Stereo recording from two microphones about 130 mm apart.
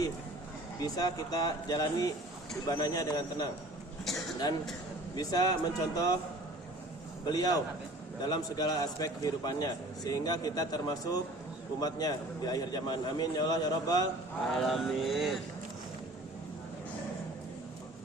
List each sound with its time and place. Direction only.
0.8 s a man's voice: 30° left (ahead or behind)
4.0 s speech: centre (ahead or behind)
5.1 s a man's voice: 30° left (ahead or behind)
7.3 s a man's voice: 30° left (ahead or behind)
14.6 s speech: centre (ahead or behind)